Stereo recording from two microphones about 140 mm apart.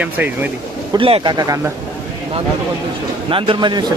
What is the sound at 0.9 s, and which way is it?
Speech, 40° right (ahead or behind).